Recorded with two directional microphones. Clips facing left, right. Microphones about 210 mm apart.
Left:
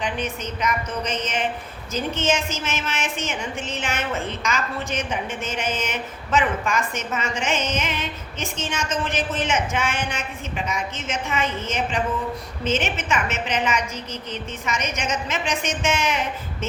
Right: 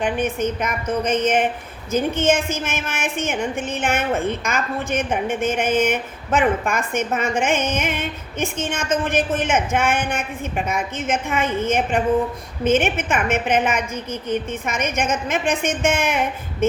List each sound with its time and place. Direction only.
0.0 s a woman's voice: 55° right (ahead or behind)